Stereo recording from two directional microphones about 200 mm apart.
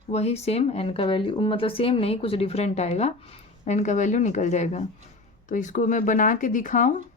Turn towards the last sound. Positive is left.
turn(degrees=40)  # may be behind; listen again after turning